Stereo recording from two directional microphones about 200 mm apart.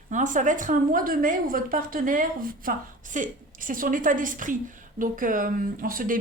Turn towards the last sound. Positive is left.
turn(degrees=-45)  # may be behind; listen again after turning